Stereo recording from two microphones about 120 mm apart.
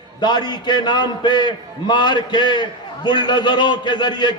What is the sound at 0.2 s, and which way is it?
A man's voice, 35° left (ahead or behind).